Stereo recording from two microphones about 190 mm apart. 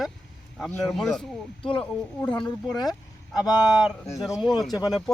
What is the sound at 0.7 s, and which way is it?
A man's voice, 5° left (ahead or behind).